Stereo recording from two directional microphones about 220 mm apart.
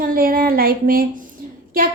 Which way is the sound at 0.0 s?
40° right (ahead or behind).